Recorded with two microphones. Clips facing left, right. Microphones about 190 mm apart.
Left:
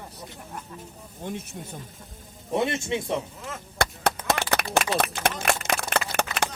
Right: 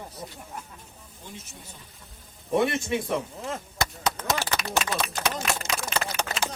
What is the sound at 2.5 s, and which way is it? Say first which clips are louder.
Speech: right 1 dB; 25° left (ahead or behind).